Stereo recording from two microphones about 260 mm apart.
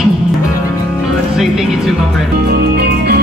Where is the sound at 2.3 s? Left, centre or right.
Right.